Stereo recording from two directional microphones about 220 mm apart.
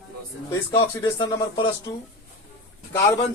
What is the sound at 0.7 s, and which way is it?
Speech, 20° left (ahead or behind).